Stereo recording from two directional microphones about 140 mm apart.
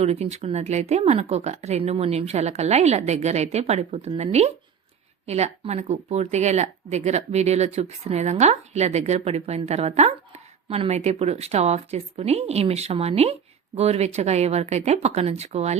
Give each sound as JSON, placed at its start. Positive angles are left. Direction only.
{"t": 0.0, "sound": "speech", "side_deg": -50}